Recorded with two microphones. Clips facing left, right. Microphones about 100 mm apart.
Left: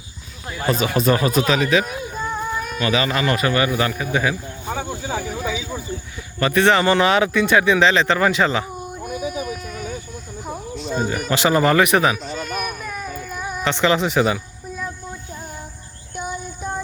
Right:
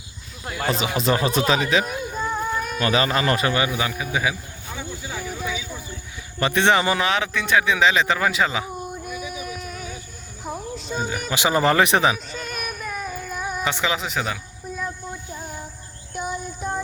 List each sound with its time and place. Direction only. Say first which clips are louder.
0.8 s speech: left 4 dB; 20° right (ahead or behind)
1.4 s speech: left 2 dB; 30° right (ahead or behind)
1.8 s a sound: even; centre (ahead or behind)
2.8 s speech: left 1 dB; 35° right (ahead or behind)
3.7 s speech: left 4 dB; 5° right (ahead or behind)
4.7 s a sound: left 7 dB; 60° left (ahead or behind)
6.4 s speech: left 3 dB; 25° right (ahead or behind)
7.0 s speech: left 6 dB; centre (ahead or behind)
9.5 s a sound: left 4 dB; centre (ahead or behind)
10.4 s cricket: left 1 dB; centre (ahead or behind)
11.3 s speech: left 3 dB; 15° right (ahead or behind)
11.6 s speech: even; 30° right (ahead or behind)
12.1 s a sound: left 5 dB; centre (ahead or behind)
16.1 s child singing: even; centre (ahead or behind)